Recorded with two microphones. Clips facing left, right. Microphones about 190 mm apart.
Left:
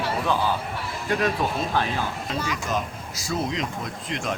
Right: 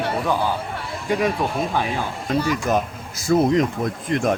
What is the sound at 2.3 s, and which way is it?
Speech, 55° right (ahead or behind).